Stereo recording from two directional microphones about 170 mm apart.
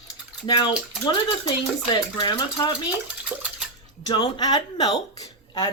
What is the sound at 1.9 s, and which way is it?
Speech, 25° left (ahead or behind).